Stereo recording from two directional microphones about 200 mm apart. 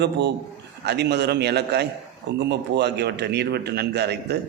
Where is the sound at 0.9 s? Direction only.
55° right (ahead or behind).